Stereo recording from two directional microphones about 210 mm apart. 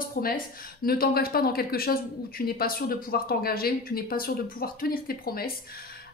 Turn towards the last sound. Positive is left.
turn(degrees=45)  # may be behind; listen again after turning